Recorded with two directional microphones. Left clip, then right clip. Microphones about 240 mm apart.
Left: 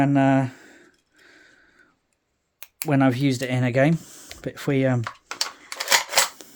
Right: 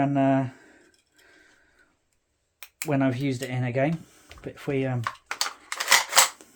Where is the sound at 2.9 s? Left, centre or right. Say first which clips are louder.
Left 5 dB; left.